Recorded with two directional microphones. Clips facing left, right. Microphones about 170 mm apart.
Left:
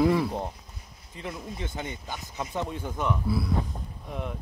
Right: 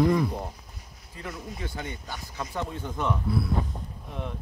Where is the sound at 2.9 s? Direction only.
5° left (ahead or behind).